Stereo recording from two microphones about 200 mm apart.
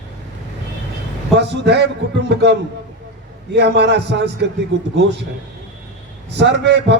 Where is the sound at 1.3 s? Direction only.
55° right (ahead or behind).